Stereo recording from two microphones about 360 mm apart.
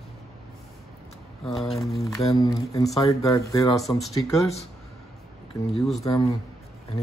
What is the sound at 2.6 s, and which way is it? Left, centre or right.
Speech, centre.